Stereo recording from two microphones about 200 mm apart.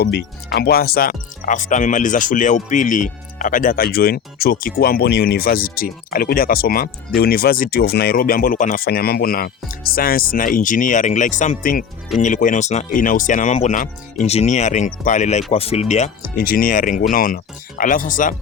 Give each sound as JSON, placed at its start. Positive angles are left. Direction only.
{"t": 0.0, "sound": "speech", "side_deg": 55}